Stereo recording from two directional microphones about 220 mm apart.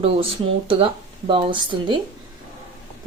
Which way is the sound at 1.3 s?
25° right (ahead or behind).